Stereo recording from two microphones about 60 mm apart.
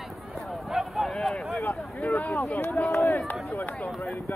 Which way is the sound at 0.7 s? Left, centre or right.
Centre.